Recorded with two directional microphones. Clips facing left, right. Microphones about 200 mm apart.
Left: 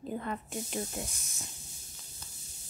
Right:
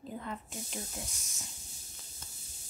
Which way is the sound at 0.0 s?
60° left (ahead or behind).